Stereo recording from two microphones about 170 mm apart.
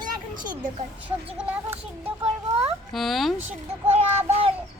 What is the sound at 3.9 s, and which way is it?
Child singing, 35° right (ahead or behind).